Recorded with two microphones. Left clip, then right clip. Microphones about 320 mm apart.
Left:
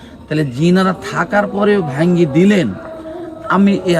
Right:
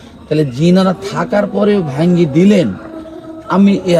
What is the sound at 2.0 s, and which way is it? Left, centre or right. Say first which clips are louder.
Speech: right 1 dB; centre.